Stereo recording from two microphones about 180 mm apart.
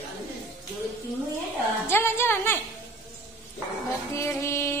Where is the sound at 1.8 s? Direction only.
15° left (ahead or behind).